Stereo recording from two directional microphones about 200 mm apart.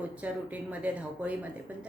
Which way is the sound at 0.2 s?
5° right (ahead or behind).